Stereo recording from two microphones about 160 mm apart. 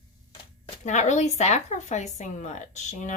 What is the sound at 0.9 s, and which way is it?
A woman's voice, 45° left (ahead or behind).